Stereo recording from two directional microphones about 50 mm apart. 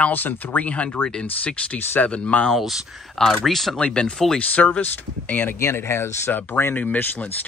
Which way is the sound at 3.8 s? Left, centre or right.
Left.